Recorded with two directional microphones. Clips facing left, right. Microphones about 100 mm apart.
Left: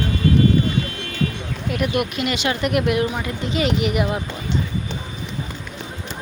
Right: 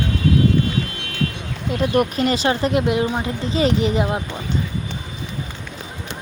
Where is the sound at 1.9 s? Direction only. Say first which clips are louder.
Right 4 dB; 35° right (ahead or behind).